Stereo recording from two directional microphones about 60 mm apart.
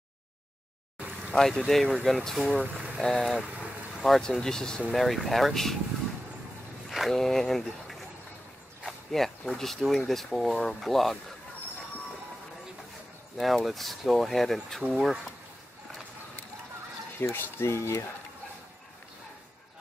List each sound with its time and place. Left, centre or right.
1.3 s speech: centre
6.9 s speech: centre
13.4 s speech: centre
17.2 s speech: left